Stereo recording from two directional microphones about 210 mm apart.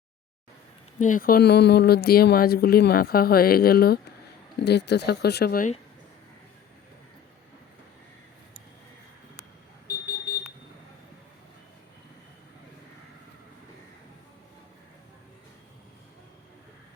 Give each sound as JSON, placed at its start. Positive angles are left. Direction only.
{"t": 0.9, "sound": "speech", "side_deg": 40}